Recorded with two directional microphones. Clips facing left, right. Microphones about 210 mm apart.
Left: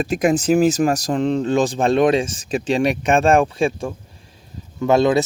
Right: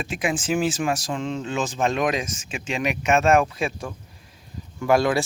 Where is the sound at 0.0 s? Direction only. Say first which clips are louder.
Left 9 dB; 40° left (ahead or behind).